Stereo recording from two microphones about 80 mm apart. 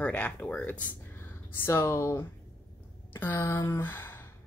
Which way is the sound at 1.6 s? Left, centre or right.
Left.